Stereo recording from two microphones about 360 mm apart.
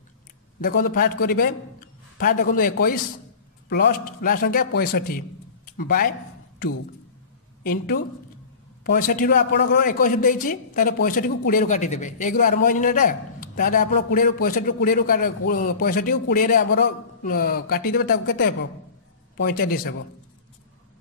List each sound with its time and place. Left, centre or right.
0.6 s a man's voice: left
7.6 s a man's voice: left